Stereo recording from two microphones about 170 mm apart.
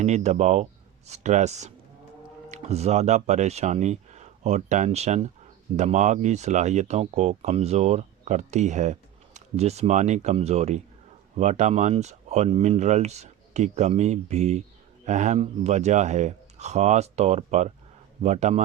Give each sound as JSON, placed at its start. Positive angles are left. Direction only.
{"t": 0.0, "sound": "speech", "side_deg": -40}